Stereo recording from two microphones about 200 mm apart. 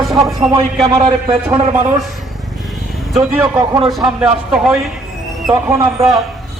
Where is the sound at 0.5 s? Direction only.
25° right (ahead or behind).